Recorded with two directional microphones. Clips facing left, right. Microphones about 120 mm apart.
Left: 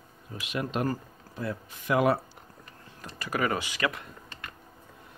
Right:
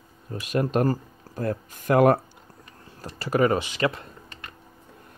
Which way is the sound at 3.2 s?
30° right (ahead or behind).